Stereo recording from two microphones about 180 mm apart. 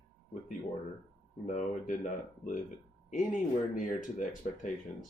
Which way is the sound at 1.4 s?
45° left (ahead or behind).